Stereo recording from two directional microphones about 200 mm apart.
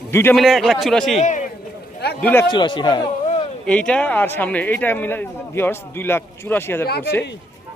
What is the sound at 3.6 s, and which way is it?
Speech, 5° left (ahead or behind).